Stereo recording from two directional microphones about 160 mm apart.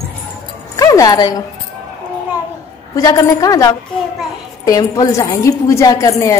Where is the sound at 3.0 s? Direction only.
25° left (ahead or behind).